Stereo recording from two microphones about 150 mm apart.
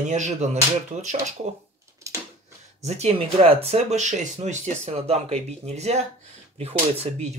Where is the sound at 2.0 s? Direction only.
20° right (ahead or behind).